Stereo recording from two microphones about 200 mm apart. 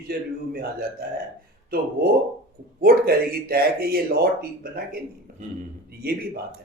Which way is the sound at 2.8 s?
50° right (ahead or behind).